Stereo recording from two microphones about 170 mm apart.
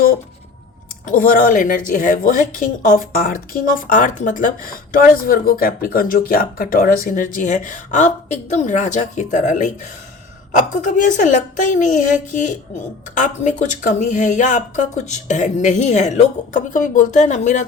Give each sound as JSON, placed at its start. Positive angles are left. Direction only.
{"t": 1.0, "sound": "speech", "side_deg": 55}
{"t": 10.8, "sound": "speech", "side_deg": 50}